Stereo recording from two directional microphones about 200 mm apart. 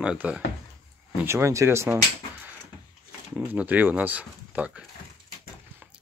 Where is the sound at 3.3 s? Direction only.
10° right (ahead or behind).